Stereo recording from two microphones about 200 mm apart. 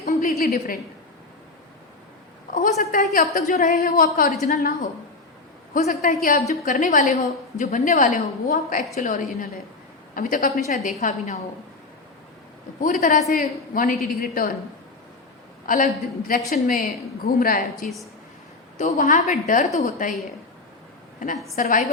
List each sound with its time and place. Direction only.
0.0 s a woman's voice: 45° left (ahead or behind)
2.6 s a woman's voice: 40° left (ahead or behind)
12.8 s a woman's voice: 40° left (ahead or behind)
15.6 s a woman's voice: 40° left (ahead or behind)
21.5 s a woman's voice: 40° left (ahead or behind)